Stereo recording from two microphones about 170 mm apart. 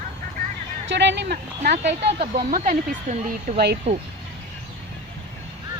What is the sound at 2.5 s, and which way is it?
Speech, 50° right (ahead or behind).